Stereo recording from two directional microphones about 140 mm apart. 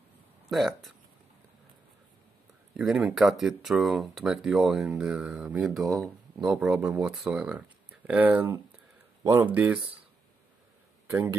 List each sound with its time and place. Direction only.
0.5 s speech: centre (ahead or behind)
2.7 s speech: centre (ahead or behind)
11.1 s speech: 20° right (ahead or behind)